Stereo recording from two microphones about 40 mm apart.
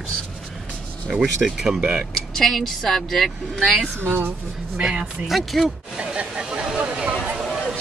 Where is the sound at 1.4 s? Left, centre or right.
Right.